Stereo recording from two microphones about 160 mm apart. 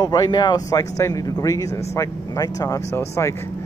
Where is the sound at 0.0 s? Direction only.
25° left (ahead or behind).